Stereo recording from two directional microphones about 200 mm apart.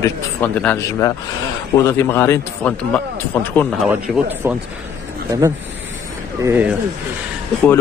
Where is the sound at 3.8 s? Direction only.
5° right (ahead or behind).